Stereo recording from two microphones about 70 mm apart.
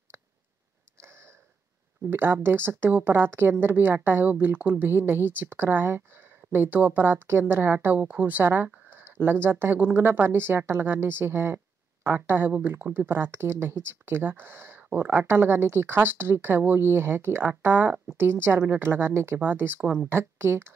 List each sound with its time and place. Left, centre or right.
2.0 s a woman's voice: right
4.9 s speech: right
8.0 s a woman's voice: centre